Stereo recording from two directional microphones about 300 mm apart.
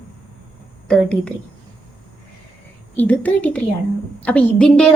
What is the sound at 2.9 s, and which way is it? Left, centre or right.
A woman's voice, centre.